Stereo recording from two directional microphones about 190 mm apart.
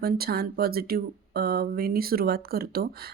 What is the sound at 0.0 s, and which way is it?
Speech, 55° right (ahead or behind).